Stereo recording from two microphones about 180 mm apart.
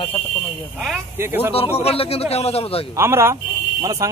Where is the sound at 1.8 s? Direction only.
35° left (ahead or behind).